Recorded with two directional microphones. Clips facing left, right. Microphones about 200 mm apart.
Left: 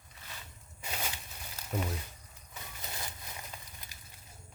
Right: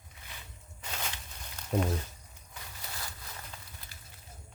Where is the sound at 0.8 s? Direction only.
10° left (ahead or behind).